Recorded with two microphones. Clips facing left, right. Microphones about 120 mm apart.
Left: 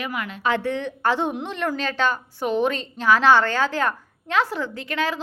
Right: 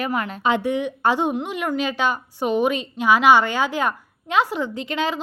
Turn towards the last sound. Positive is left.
turn(degrees=-20)  # may be behind; listen again after turning